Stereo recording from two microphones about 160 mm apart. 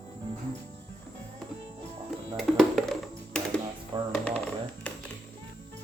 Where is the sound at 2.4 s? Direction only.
Centre (ahead or behind).